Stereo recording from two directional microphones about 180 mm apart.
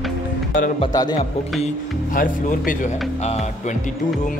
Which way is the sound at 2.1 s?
45° left (ahead or behind).